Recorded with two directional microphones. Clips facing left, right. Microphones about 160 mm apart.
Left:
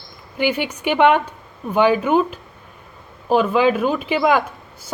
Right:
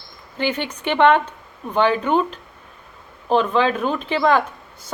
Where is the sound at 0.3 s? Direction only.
10° left (ahead or behind).